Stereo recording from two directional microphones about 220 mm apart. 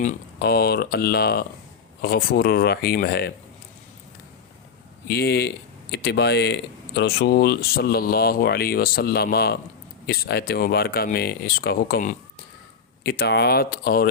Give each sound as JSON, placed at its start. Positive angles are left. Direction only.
{"t": 0.0, "sound": "speech", "side_deg": 40}
{"t": 5.0, "sound": "speech", "side_deg": 45}